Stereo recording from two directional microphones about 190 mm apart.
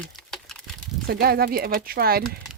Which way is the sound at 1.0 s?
55° right (ahead or behind).